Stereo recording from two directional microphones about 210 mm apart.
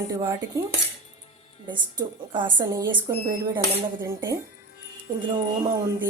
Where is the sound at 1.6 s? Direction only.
20° right (ahead or behind).